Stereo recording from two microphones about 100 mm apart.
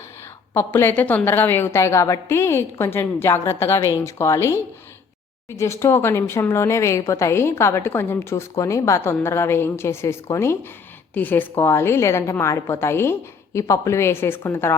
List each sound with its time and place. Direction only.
0.5 s speech: 25° left (ahead or behind)